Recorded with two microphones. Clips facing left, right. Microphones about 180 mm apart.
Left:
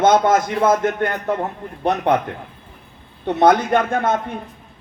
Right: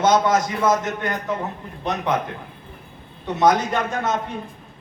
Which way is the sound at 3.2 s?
55° left (ahead or behind).